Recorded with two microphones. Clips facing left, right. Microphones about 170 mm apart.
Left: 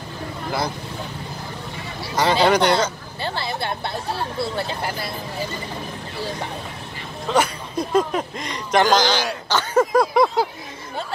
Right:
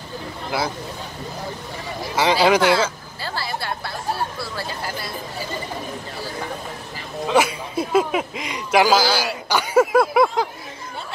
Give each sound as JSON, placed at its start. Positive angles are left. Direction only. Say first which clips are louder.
{"t": 2.1, "sound": "speech", "louder": "even", "side_deg": -5}
{"t": 3.2, "sound": "speech", "louder": "left 2 dB", "side_deg": 20}
{"t": 7.2, "sound": "speech", "louder": "right 2 dB", "side_deg": -10}